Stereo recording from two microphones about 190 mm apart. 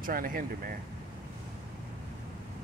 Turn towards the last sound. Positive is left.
turn(degrees=-50)  # may be behind; listen again after turning